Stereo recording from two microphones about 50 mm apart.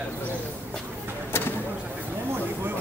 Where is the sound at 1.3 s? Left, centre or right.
Left.